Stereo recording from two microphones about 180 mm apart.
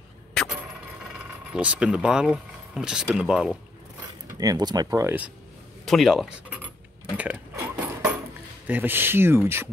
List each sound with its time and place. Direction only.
0.4 s a sound: centre (ahead or behind)
1.5 s speech: 5° right (ahead or behind)
4.4 s speech: 20° right (ahead or behind)
5.9 s speech: centre (ahead or behind)
7.2 s a sound: 10° right (ahead or behind)
8.6 s speech: 10° right (ahead or behind)